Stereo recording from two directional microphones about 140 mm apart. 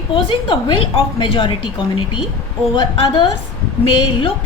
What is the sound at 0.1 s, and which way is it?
A woman's voice, 40° left (ahead or behind).